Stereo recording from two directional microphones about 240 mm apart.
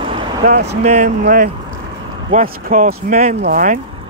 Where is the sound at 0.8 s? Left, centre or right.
Right.